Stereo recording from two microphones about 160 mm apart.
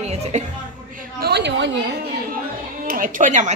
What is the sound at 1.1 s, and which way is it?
Speech, 85° right.